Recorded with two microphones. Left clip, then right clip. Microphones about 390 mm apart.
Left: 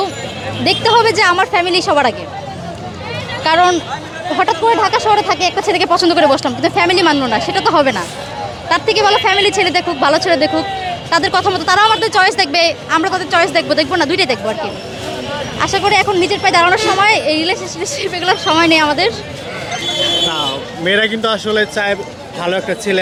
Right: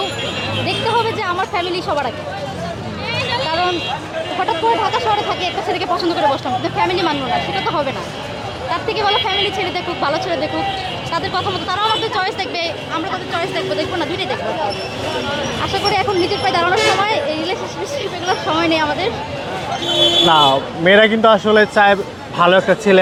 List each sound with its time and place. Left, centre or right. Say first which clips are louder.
0.6 s speech: left 7 dB; left
3.4 s speech: left 12 dB; left
15.6 s speech: left 6 dB; left
20.8 s speech: right 3 dB; centre